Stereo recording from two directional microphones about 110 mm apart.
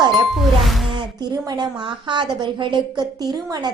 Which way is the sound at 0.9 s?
40° right (ahead or behind).